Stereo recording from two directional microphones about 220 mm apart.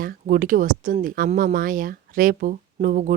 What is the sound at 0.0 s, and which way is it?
Speech, 40° right (ahead or behind).